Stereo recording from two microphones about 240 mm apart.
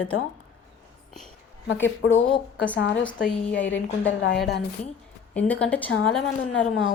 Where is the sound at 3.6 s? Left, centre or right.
Left.